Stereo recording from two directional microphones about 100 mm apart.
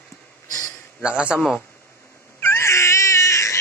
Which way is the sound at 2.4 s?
25° left (ahead or behind).